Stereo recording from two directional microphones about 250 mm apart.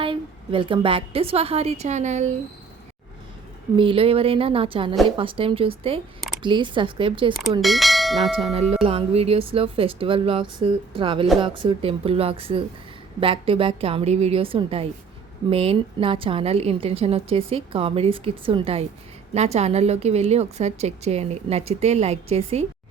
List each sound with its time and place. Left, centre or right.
0.0 s a woman's voice: right
3.8 s a woman's voice: right
7.6 s bell: centre
8.5 s a woman's voice: right